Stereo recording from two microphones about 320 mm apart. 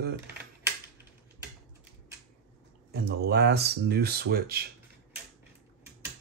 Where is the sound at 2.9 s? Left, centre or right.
Right.